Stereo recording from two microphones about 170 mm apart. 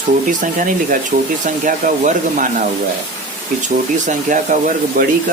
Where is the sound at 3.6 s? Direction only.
50° right (ahead or behind).